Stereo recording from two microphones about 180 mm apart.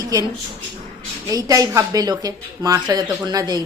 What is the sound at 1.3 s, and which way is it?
Speech, 20° right (ahead or behind).